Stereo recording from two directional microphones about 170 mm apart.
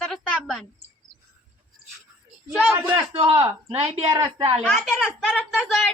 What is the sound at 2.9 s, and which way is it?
Speech, 30° right (ahead or behind).